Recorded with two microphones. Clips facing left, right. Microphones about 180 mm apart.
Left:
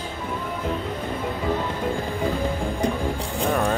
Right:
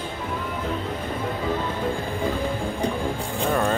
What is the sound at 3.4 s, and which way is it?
Speech, centre (ahead or behind).